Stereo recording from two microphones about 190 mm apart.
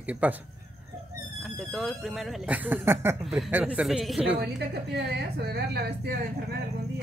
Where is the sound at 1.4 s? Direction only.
Centre (ahead or behind).